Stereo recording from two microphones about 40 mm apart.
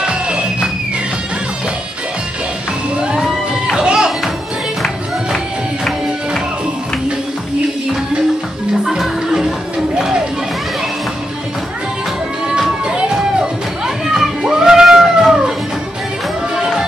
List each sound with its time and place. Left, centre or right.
0.0 s music: right
3.7 s music: centre
8.9 s music: centre
12.4 s a sound: centre
12.8 s music: centre